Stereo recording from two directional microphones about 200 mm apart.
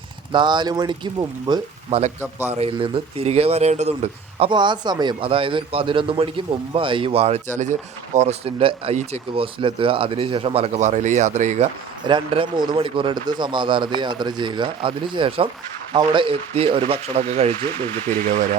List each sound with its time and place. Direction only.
0.3 s speech: 20° right (ahead or behind)
12.0 s speech: 25° right (ahead or behind)